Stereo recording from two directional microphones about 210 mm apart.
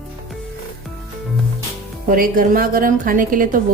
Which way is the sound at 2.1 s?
40° right (ahead or behind).